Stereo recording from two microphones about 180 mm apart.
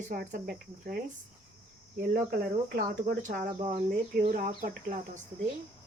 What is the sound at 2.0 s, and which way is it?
Speech, 55° right (ahead or behind).